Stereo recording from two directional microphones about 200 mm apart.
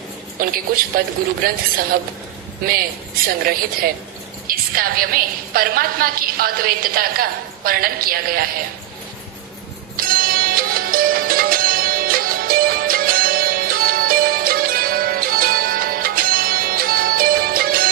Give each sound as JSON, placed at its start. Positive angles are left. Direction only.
{"t": 0.4, "sound": "a woman's voice", "side_deg": -45}
{"t": 2.6, "sound": "a woman's voice", "side_deg": -45}
{"t": 10.0, "sound": "music", "side_deg": -45}